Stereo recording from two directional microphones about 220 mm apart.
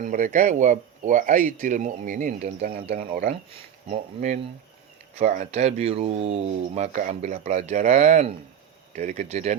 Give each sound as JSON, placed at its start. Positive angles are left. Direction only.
{"t": 0.0, "sound": "speech", "side_deg": -35}
{"t": 3.8, "sound": "speech", "side_deg": -30}